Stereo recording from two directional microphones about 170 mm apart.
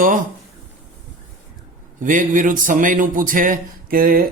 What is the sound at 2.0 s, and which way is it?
A man's voice, 50° right (ahead or behind).